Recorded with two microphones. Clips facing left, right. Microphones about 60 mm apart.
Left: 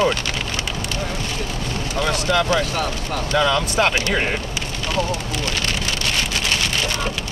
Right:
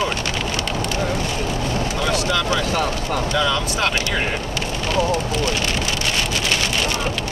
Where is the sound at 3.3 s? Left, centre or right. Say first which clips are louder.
Left 4 dB; left.